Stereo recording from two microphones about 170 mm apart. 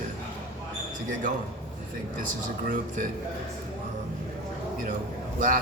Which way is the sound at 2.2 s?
50° right (ahead or behind).